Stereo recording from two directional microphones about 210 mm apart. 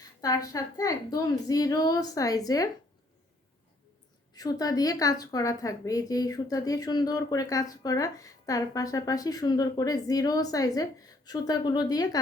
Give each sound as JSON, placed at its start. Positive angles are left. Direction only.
{"t": 0.2, "sound": "a woman's voice", "side_deg": 15}
{"t": 4.4, "sound": "a woman's voice", "side_deg": 15}